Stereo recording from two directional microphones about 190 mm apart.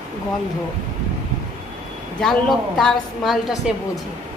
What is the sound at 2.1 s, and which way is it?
A woman's voice, 5° left (ahead or behind).